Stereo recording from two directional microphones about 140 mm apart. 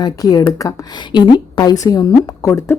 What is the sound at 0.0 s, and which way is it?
A woman's voice, 30° left (ahead or behind).